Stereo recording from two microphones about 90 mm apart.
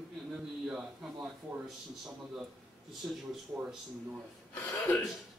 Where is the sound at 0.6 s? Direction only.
10° right (ahead or behind).